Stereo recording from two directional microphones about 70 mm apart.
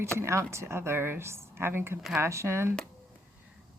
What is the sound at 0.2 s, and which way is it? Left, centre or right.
Speech, right.